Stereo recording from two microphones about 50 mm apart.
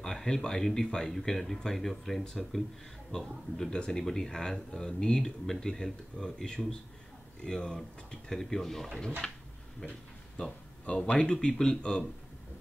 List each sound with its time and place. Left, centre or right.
0.0 s speech: centre
10.9 s speech: centre